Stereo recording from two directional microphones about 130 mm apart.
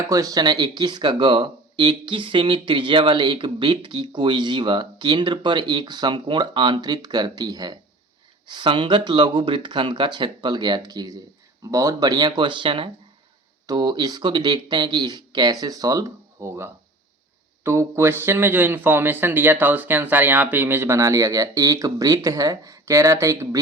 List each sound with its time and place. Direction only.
0.1 s a man's voice: 30° right (ahead or behind)